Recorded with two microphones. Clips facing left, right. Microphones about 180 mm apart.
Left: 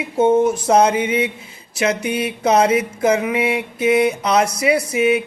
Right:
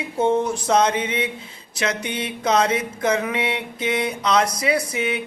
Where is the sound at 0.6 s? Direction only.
25° left (ahead or behind).